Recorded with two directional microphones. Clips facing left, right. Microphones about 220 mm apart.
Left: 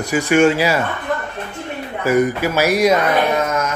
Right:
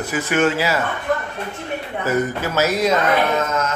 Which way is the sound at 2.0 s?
10° left (ahead or behind).